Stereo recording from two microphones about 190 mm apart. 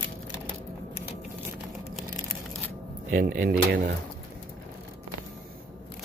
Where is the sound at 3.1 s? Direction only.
45° right (ahead or behind).